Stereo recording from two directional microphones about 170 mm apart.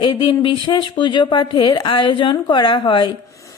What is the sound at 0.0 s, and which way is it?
Speech, 30° left (ahead or behind).